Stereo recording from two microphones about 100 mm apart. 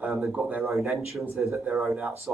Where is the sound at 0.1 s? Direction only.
5° right (ahead or behind).